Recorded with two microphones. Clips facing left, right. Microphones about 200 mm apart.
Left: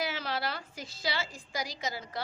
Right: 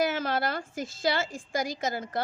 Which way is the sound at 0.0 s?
50° right (ahead or behind).